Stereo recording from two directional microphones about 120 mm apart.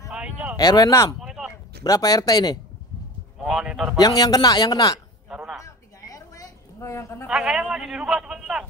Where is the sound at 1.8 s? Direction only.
30° left (ahead or behind).